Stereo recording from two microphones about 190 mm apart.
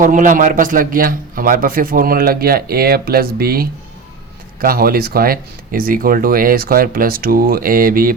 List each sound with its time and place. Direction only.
0.0 s a man's voice: 45° right (ahead or behind)